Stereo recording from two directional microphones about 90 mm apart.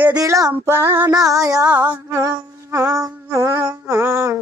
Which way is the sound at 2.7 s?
35° right (ahead or behind).